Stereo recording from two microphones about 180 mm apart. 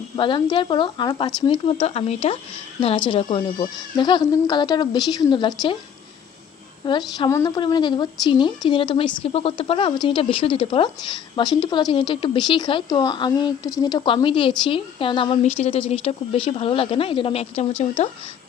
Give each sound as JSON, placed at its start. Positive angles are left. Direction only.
{"t": 0.2, "sound": "a woman's voice", "side_deg": 25}
{"t": 6.8, "sound": "a woman's voice", "side_deg": 25}